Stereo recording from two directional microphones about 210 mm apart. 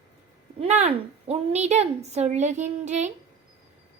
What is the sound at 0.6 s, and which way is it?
A child's voice, 30° right (ahead or behind).